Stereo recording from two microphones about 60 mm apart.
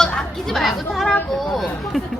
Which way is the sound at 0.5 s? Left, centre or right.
Centre.